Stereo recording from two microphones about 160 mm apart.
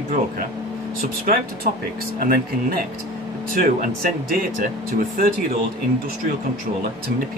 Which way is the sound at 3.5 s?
65° right (ahead or behind).